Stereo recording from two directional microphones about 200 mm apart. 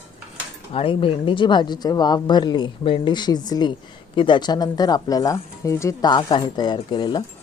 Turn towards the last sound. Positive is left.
turn(degrees=20)  # may be behind; listen again after turning